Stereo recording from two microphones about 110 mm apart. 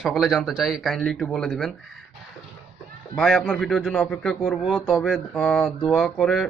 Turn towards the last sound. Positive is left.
turn(degrees=0)  # may be behind; listen again after turning